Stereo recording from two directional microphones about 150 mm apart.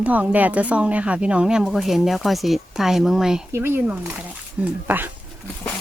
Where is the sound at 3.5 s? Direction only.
15° right (ahead or behind).